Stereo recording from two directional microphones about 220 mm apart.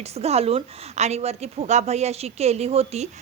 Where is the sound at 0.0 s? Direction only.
30° right (ahead or behind).